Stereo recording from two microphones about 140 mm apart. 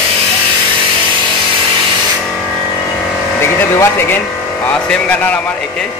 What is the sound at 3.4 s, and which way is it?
Speech, 15° left (ahead or behind).